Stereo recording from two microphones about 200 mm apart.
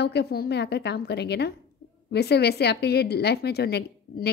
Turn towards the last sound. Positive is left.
turn(degrees=55)  # may be behind; listen again after turning